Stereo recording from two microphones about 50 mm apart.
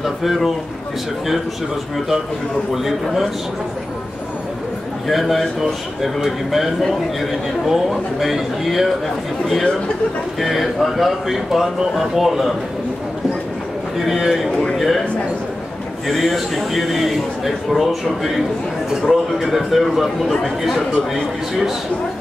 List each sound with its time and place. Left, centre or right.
0.0 s speech: centre
2.7 s speech: centre
5.0 s speech: centre
13.9 s speech: centre
14.5 s a man's voice: centre
14.8 s speech: centre
16.1 s speech: centre